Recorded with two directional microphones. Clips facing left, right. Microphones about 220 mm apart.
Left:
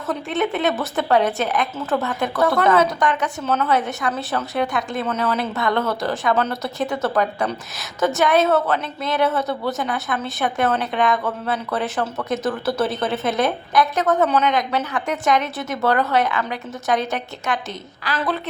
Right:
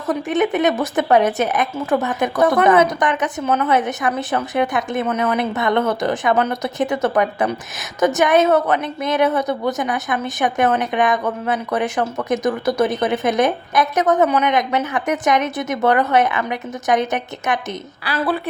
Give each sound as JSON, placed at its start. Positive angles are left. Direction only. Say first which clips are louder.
{"t": 0.1, "sound": "a woman's voice", "louder": "right 4 dB", "side_deg": -15}